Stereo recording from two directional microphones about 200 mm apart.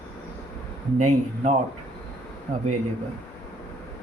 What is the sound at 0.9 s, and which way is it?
Speech, 35° right (ahead or behind).